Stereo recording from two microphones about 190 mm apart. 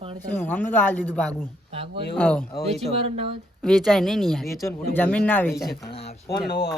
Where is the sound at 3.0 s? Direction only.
30° right (ahead or behind).